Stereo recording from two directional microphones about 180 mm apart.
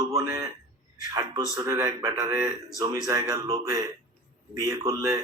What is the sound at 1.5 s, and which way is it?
Speech, 20° right (ahead or behind).